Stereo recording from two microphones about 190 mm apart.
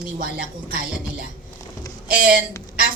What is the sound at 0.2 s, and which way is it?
Speech, 50° right (ahead or behind).